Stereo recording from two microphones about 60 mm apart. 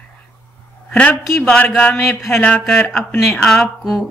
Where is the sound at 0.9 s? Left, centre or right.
Centre.